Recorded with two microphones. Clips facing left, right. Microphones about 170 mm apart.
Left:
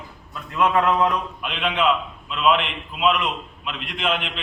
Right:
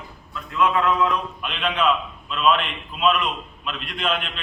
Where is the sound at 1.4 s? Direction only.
10° left (ahead or behind).